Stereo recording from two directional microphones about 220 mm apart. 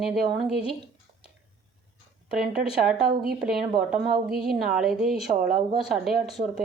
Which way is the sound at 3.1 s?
40° right (ahead or behind).